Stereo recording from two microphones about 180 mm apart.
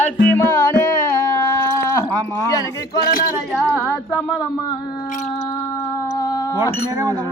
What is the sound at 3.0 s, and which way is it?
Speech, 50° left (ahead or behind).